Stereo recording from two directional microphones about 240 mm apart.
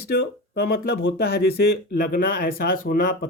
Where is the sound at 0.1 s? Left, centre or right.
Left.